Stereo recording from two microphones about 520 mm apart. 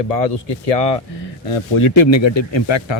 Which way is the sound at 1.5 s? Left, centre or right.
Left.